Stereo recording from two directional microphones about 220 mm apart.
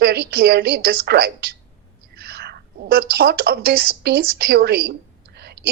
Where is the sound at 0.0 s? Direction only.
45° right (ahead or behind).